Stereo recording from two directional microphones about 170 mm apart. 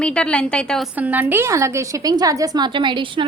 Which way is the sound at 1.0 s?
10° right (ahead or behind).